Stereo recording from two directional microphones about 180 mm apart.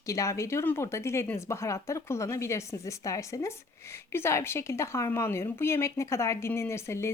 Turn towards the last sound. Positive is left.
turn(degrees=15)  # may be behind; listen again after turning